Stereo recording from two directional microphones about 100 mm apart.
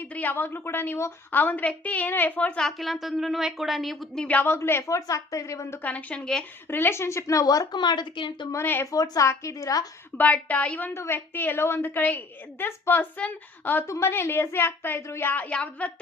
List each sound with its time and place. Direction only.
0.0 s a woman's voice: 20° left (ahead or behind)
5.8 s a woman's voice: 15° left (ahead or behind)
6.7 s a woman's voice: 20° left (ahead or behind); by 8.4 s 50° left (ahead or behind)
8.5 s a woman's voice: 25° left (ahead or behind)
8.9 s a woman's voice: 35° left (ahead or behind)
10.2 s a woman's voice: 15° left (ahead or behind)
13.8 s a woman's voice: 30° left (ahead or behind); by 15.9 s 10° left (ahead or behind)